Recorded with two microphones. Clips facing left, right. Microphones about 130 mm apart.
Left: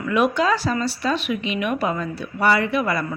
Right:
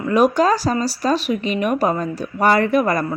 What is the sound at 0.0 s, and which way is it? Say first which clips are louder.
Speech: right 4 dB; 40° right (ahead or behind).